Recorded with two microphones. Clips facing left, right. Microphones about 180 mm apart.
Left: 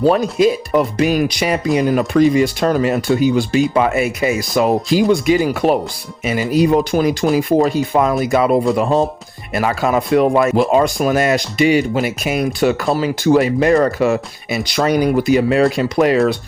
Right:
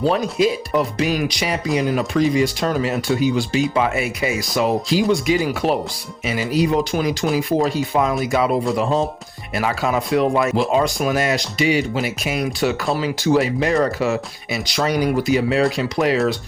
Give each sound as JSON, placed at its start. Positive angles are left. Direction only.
{"t": 0.0, "sound": "speech", "side_deg": 50}